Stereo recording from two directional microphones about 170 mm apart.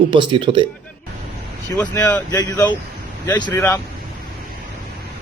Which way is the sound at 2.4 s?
20° left (ahead or behind).